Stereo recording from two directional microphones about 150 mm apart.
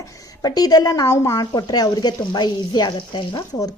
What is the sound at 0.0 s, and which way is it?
A woman's voice, 25° left (ahead or behind).